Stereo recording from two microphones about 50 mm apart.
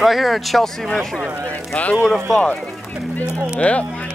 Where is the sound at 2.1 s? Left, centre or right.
Centre.